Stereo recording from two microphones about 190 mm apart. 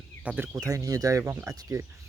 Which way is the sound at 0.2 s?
10° right (ahead or behind).